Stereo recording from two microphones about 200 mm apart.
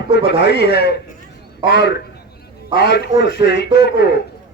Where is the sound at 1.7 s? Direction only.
60° left (ahead or behind).